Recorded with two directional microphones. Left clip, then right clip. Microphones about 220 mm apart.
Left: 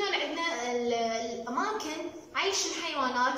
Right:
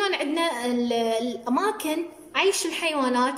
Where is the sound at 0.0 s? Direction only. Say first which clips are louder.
Right 6 dB; 50° right (ahead or behind).